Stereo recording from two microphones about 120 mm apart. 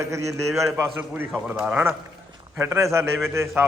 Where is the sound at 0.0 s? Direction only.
25° right (ahead or behind).